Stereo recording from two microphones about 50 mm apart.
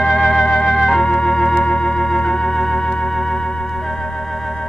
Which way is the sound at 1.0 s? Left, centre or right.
Centre.